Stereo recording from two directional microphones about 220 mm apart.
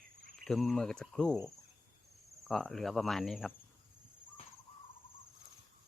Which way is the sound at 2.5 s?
Centre (ahead or behind).